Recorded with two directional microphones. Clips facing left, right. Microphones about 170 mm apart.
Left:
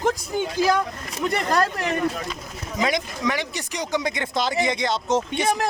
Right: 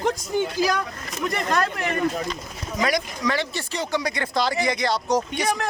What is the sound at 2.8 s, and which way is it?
Speech, 20° left (ahead or behind).